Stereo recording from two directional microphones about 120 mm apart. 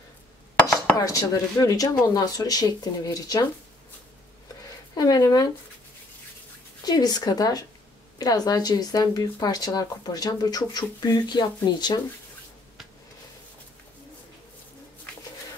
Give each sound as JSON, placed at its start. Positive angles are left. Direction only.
{"t": 0.7, "sound": "chopping", "side_deg": 30}
{"t": 2.0, "sound": "speech", "side_deg": 35}
{"t": 4.9, "sound": "speech", "side_deg": 30}
{"t": 6.8, "sound": "speech", "side_deg": 35}